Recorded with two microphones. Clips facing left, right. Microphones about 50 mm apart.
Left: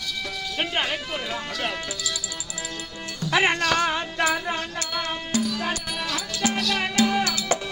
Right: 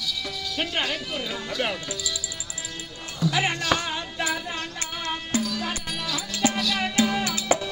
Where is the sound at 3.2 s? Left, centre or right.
Left.